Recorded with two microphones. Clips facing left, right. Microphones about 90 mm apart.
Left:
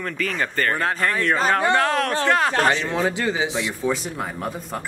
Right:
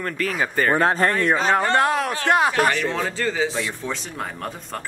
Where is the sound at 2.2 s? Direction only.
15° right (ahead or behind).